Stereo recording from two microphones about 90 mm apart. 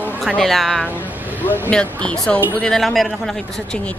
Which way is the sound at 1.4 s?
20° left (ahead or behind).